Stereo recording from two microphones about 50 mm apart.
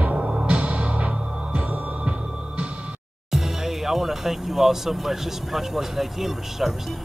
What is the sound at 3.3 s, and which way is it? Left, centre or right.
Speech, centre.